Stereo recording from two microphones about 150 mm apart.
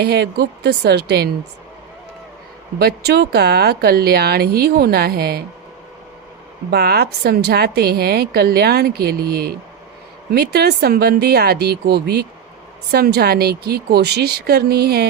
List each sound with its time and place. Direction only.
0.0 s a woman's voice: 90° right
2.7 s a woman's voice: 90° right
6.7 s a woman's voice: 90° right